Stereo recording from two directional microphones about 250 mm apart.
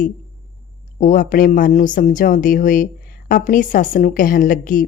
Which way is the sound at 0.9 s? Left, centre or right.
Left.